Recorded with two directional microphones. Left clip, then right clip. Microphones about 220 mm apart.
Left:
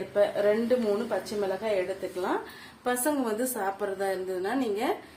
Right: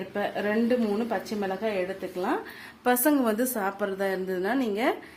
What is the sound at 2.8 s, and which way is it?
A woman's voice, 50° right (ahead or behind).